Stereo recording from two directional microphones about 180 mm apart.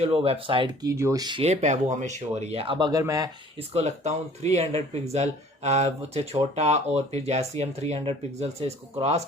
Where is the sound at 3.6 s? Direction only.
35° right (ahead or behind).